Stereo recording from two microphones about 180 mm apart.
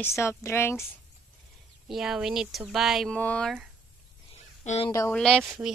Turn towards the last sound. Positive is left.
turn(degrees=5)  # may be behind; listen again after turning